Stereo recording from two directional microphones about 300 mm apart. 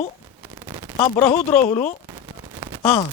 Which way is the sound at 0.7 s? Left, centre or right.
Centre.